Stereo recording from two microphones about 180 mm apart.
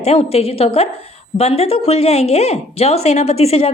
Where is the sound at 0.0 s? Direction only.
35° left (ahead or behind).